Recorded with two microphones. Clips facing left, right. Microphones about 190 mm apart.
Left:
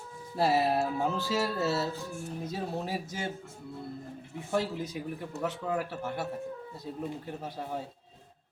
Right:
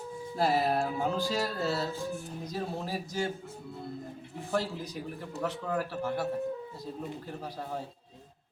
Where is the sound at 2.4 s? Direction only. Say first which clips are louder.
Left 1 dB; 25° left (ahead or behind).